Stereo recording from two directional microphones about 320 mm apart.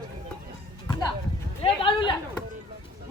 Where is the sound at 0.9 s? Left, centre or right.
Centre.